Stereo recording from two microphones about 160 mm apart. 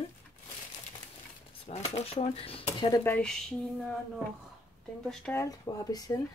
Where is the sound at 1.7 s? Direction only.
40° left (ahead or behind).